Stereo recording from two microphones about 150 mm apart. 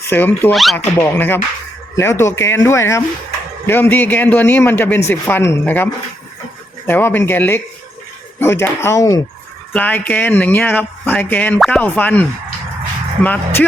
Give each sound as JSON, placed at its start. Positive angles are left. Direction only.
{"t": 0.1, "sound": "a man's voice", "side_deg": 15}
{"t": 0.5, "sound": "speech", "side_deg": 0}
{"t": 0.9, "sound": "a man's voice", "side_deg": 15}
{"t": 9.7, "sound": "a man's voice", "side_deg": 10}
{"t": 13.2, "sound": "a man's voice", "side_deg": 10}